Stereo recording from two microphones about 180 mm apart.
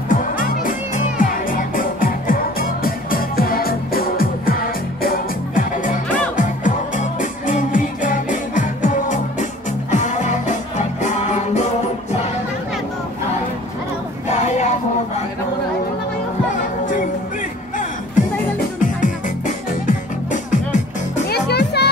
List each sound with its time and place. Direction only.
0.1 s music: 50° left (ahead or behind)
14.3 s music: 40° left (ahead or behind)
18.8 s music: 45° left (ahead or behind)
21.3 s music: 65° left (ahead or behind)